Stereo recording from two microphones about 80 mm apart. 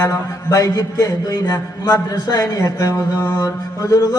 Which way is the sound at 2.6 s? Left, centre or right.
Left.